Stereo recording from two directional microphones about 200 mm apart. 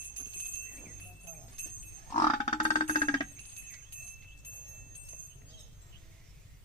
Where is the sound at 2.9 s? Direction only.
25° left (ahead or behind).